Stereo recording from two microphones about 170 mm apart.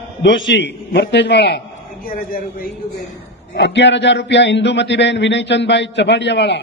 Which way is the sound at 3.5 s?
90° left.